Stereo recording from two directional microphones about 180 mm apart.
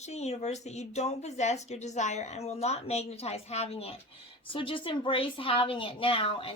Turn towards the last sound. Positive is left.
turn(degrees=30)  # may be behind; listen again after turning